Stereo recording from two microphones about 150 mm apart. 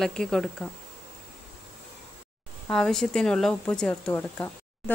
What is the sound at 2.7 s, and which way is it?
Speech, 5° left (ahead or behind).